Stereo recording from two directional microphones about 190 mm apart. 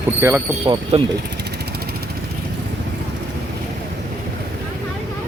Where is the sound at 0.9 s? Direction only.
35° right (ahead or behind).